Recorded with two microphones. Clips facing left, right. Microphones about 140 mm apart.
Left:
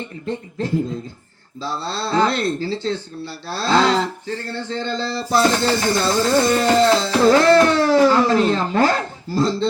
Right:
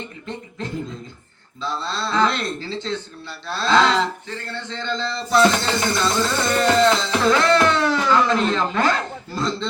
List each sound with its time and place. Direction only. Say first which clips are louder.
1.6 s speech: left 1 dB; 35° left (ahead or behind)